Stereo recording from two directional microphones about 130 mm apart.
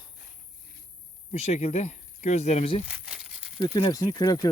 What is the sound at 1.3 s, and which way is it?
Speech, 55° left (ahead or behind).